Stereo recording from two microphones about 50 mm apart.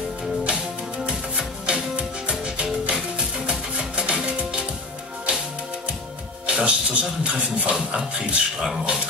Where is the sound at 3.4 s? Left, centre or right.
Right.